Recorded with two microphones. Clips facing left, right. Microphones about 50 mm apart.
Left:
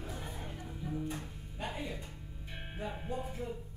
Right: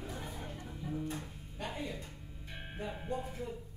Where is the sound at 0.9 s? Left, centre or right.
Centre.